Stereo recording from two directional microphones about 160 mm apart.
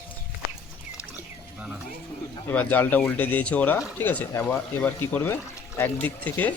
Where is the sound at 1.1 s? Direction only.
10° right (ahead or behind).